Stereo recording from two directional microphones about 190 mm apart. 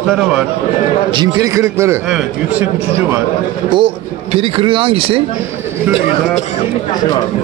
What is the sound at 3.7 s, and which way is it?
Speech, 30° right (ahead or behind).